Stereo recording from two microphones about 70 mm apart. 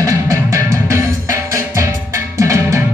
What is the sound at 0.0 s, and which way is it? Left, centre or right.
Music, right.